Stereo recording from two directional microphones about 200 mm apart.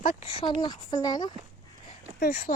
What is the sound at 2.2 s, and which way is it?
Speech, 45° left (ahead or behind).